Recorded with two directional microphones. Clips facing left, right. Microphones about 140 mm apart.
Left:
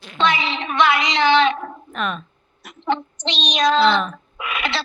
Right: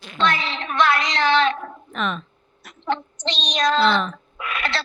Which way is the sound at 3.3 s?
75° left (ahead or behind).